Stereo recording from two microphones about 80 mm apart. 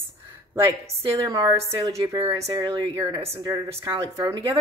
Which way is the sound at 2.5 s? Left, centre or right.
Right.